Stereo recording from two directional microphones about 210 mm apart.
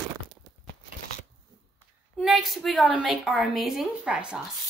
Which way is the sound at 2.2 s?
Centre (ahead or behind).